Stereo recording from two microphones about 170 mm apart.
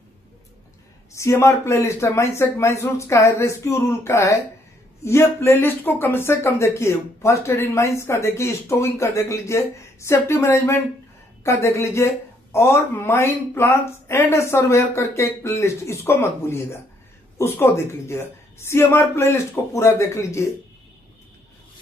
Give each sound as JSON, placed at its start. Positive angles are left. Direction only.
{"t": 1.1, "sound": "speech", "side_deg": 15}